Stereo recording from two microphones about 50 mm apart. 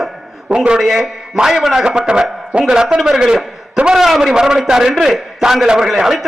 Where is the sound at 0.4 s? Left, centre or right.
Centre.